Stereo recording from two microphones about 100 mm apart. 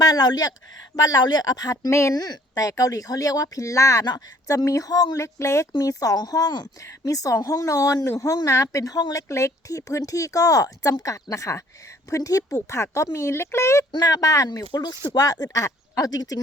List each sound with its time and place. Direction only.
0.0 s speech: 40° left (ahead or behind)
2.1 s speech: 40° left (ahead or behind)